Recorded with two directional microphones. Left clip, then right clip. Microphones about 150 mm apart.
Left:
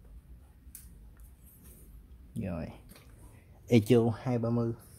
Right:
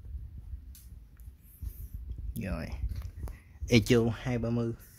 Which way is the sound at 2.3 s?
Centre (ahead or behind).